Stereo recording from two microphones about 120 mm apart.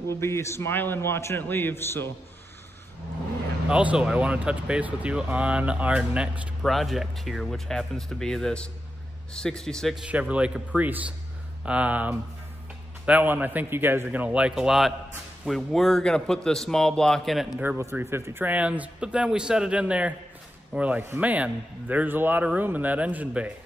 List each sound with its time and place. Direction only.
0.1 s a man's voice: 25° left (ahead or behind)
3.6 s a man's voice: 10° right (ahead or behind)
10.0 s a man's voice: 10° right (ahead or behind)
17.6 s speech: 20° right (ahead or behind)